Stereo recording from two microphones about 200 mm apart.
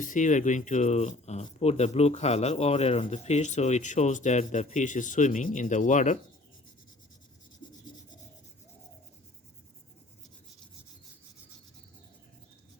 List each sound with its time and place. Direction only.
0.0 s speech: 40° left (ahead or behind)
7.6 s rub: 25° left (ahead or behind)